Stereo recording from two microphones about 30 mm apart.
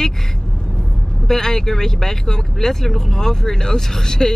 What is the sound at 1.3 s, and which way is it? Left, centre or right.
Speech, centre.